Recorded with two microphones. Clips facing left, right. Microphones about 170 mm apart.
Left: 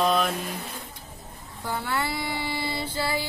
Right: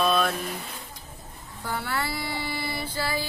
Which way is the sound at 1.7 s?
20° left (ahead or behind).